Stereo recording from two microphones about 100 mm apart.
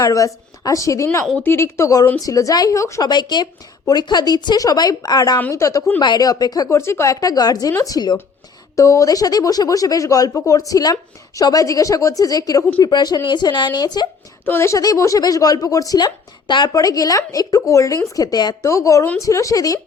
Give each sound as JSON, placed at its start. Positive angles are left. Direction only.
{"t": 0.0, "sound": "a woman's voice", "side_deg": 35}
{"t": 3.0, "sound": "a woman's voice", "side_deg": 45}
{"t": 6.0, "sound": "speech", "side_deg": 45}
{"t": 8.7, "sound": "a woman's voice", "side_deg": 30}
{"t": 14.4, "sound": "a woman's voice", "side_deg": 25}
{"t": 14.8, "sound": "speech", "side_deg": 35}
{"t": 16.7, "sound": "speech", "side_deg": 35}